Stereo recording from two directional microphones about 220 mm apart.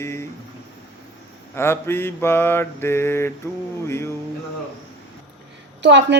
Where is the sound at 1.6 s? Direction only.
10° left (ahead or behind).